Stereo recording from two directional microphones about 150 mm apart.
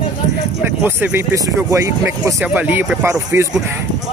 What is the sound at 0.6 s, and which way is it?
Speech, 15° right (ahead or behind).